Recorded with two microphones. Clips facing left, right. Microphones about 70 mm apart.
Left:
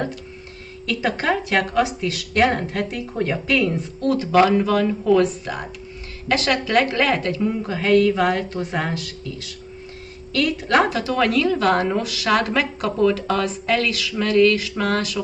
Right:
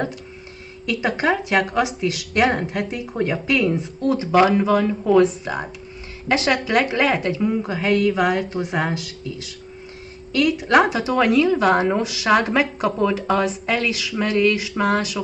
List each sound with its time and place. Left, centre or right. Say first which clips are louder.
0.8 s a woman's voice: right 1 dB; centre
10.3 s a woman's voice: right 2 dB; centre